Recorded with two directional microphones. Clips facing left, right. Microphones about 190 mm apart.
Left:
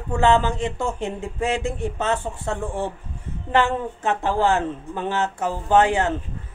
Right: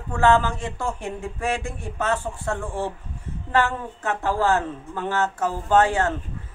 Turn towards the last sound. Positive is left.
turn(degrees=20)  # may be behind; listen again after turning